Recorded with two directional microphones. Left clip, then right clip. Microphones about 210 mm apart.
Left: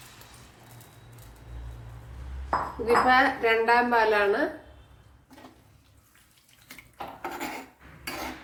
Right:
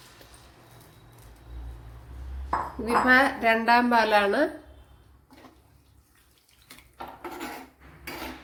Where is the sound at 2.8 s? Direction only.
50° right (ahead or behind).